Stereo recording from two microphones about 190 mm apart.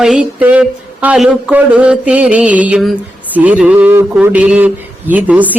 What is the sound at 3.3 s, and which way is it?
A man's voice, 10° right (ahead or behind).